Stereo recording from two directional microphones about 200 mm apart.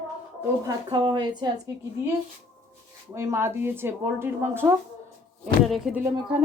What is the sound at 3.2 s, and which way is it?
A woman's voice, 15° right (ahead or behind).